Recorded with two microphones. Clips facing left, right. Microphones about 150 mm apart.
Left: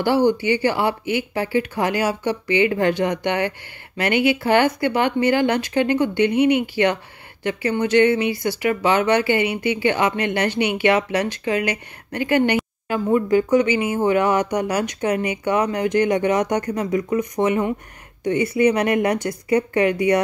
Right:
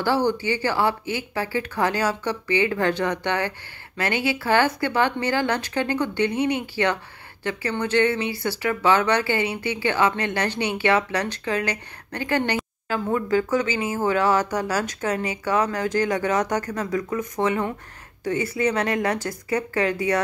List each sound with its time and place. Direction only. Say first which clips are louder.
0.3 s speech: left 5 dB; 15° left (ahead or behind)